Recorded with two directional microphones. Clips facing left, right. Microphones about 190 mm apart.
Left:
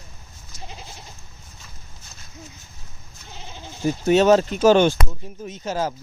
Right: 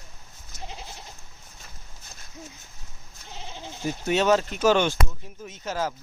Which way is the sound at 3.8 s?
40° left (ahead or behind).